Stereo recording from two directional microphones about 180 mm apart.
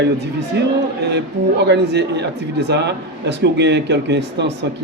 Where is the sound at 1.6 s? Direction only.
70° right (ahead or behind).